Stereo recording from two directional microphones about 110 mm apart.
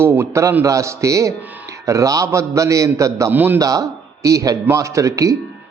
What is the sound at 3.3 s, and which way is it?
Speech, 15° right (ahead or behind).